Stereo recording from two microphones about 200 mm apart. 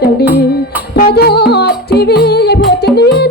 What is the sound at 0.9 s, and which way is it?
Music, 55° left (ahead or behind).